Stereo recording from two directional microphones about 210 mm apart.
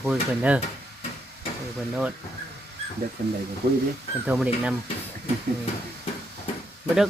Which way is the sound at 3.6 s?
50° right (ahead or behind).